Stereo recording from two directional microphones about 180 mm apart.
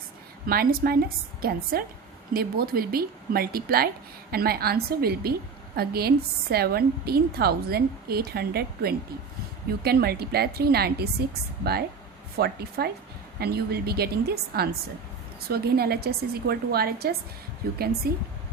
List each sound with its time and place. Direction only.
0.4 s a woman's voice: 55° right (ahead or behind)